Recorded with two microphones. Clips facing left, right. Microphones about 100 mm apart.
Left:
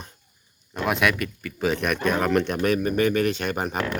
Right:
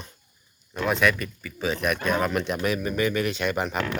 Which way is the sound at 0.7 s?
60° left (ahead or behind).